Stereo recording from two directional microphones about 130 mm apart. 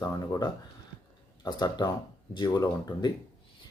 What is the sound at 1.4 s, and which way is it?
Speech, 30° left (ahead or behind).